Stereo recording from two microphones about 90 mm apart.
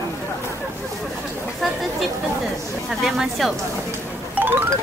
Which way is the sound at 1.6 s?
Centre (ahead or behind).